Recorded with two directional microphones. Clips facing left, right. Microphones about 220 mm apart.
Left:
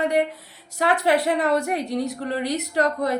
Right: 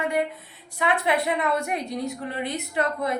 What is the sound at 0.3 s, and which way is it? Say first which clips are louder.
A woman's voice: left 4 dB; 40° left (ahead or behind).